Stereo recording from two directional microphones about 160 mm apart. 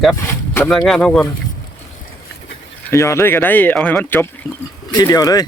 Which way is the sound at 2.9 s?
15° left (ahead or behind).